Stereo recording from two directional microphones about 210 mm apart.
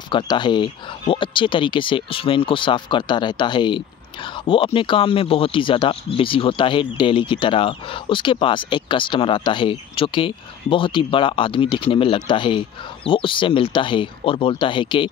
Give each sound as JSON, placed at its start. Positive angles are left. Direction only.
{"t": 0.1, "sound": "speech", "side_deg": 20}